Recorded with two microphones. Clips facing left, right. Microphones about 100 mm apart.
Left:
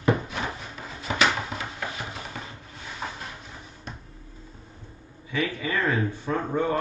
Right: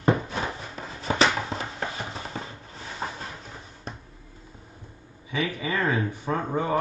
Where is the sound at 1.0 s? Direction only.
35° right (ahead or behind).